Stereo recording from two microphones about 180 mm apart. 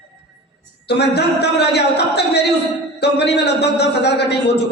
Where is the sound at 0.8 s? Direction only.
70° left (ahead or behind).